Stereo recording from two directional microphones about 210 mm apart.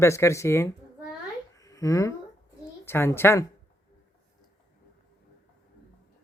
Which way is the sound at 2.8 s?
10° left (ahead or behind).